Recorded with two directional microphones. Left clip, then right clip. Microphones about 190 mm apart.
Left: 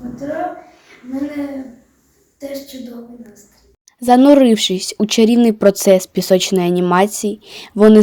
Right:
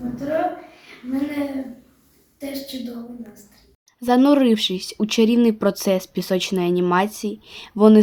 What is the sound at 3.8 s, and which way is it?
Speech, 30° left (ahead or behind).